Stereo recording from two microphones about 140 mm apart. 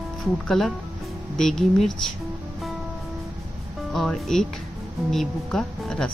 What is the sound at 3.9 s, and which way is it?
A woman's voice, centre (ahead or behind).